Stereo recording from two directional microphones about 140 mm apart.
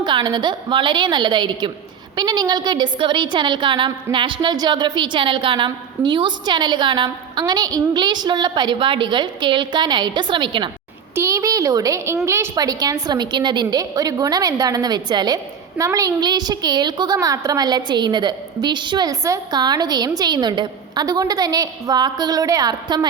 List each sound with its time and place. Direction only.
0.0 s a woman's voice: 35° right (ahead or behind)
11.1 s a woman's voice: 20° right (ahead or behind)